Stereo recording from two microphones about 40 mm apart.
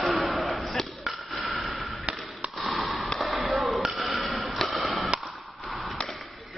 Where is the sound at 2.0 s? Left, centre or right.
Right.